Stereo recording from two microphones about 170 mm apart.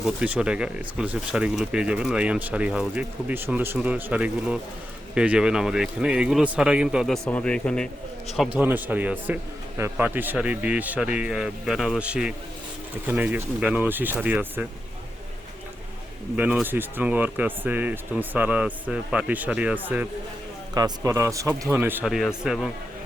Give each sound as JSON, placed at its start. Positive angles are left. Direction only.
{"t": 0.0, "sound": "speech", "side_deg": -5}
{"t": 8.5, "sound": "a man's voice", "side_deg": -10}
{"t": 16.3, "sound": "a man's voice", "side_deg": -10}
{"t": 20.7, "sound": "a man's voice", "side_deg": -20}